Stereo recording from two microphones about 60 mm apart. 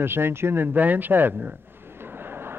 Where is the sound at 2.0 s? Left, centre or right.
Right.